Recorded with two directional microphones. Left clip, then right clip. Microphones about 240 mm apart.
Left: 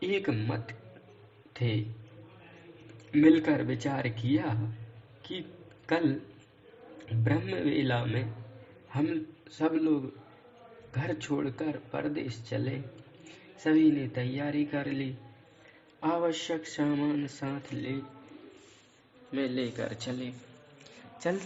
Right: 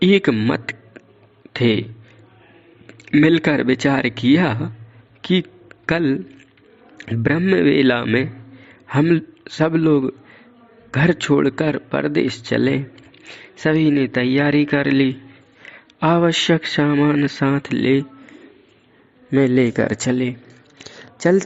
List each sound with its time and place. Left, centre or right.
0.0 s a man's voice: right
3.1 s speech: right
5.2 s a sound: right
7.2 s speech: right
19.3 s speech: right
20.7 s a sound: right